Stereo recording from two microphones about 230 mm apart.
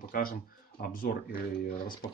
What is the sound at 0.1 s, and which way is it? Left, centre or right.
Speech, left.